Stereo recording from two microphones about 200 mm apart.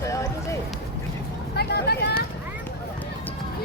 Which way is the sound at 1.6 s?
55° left (ahead or behind).